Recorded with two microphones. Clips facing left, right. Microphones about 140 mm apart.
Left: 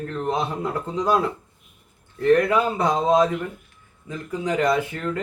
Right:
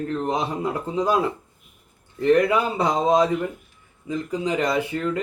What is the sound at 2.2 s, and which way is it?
Speech, 15° right (ahead or behind).